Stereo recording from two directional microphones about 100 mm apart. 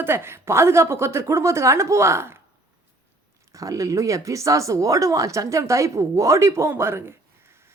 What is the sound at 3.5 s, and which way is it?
A woman's voice, 35° right (ahead or behind).